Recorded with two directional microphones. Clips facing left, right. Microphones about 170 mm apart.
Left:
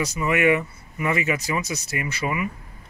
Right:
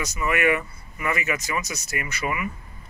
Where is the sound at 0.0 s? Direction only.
30° left (ahead or behind).